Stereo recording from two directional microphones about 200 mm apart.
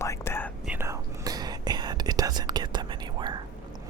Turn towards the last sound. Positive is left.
turn(degrees=-20)  # may be behind; listen again after turning